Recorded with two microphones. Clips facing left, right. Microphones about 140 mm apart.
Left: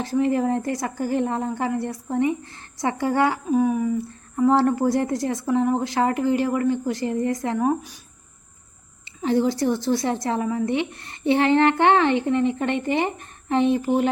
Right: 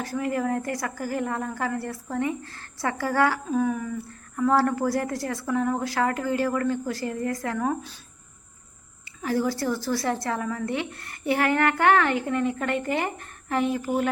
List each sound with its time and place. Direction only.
0.0 s a woman's voice: 25° left (ahead or behind)
9.2 s a woman's voice: 20° left (ahead or behind)